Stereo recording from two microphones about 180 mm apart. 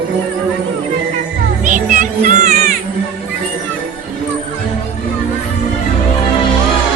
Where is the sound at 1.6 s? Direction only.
45° right (ahead or behind).